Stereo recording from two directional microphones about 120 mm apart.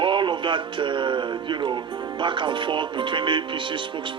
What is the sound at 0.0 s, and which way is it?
Speech, 40° right (ahead or behind).